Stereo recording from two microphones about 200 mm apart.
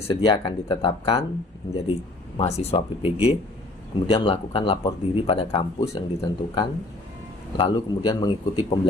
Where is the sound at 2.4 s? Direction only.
30° left (ahead or behind).